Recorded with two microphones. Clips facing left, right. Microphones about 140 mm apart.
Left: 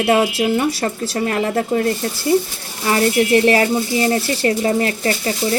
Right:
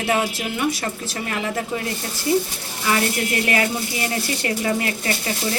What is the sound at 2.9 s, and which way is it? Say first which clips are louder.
Speech: left 7 dB; 35° left (ahead or behind).